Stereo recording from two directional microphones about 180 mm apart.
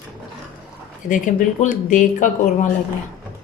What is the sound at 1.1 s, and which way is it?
Speech, 45° left (ahead or behind).